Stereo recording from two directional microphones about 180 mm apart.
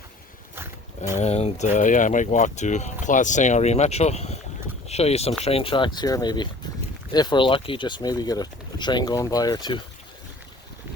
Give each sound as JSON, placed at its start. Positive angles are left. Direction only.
{"t": 0.5, "sound": "roaring cats", "side_deg": -15}
{"t": 1.2, "sound": "speech", "side_deg": 35}